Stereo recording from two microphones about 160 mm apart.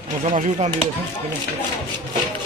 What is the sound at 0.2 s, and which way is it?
Speech, 40° right (ahead or behind).